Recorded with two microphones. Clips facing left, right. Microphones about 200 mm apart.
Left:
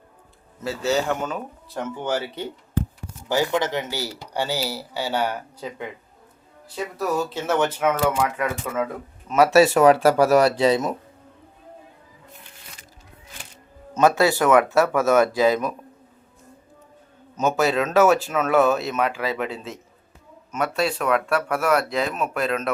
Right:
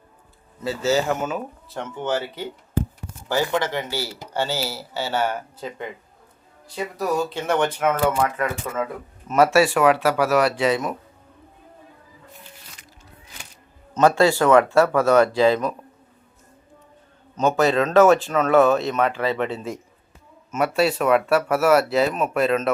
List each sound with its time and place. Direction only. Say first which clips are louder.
0.6 s speech: right 2 dB; centre (ahead or behind)
1.8 s speech: even; 10° left (ahead or behind)
6.7 s speech: right 1 dB; centre (ahead or behind)
9.2 s speech: right 1 dB; centre (ahead or behind)
9.6 s speech: left 3 dB; 40° left (ahead or behind)
13.9 s speech: right 1 dB; 10° left (ahead or behind)
17.3 s speech: right 2 dB; 5° left (ahead or behind)
20.5 s speech: right 3 dB; 5° right (ahead or behind)